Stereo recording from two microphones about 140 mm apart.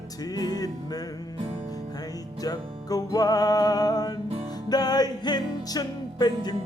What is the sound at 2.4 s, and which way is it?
Music, 25° left (ahead or behind).